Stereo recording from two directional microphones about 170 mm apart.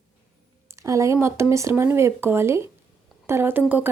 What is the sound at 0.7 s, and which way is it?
Speech, 20° right (ahead or behind).